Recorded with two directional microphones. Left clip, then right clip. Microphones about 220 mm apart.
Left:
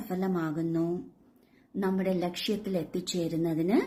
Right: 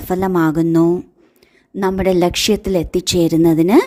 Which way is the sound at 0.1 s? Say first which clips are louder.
Right 16 dB; 45° right (ahead or behind).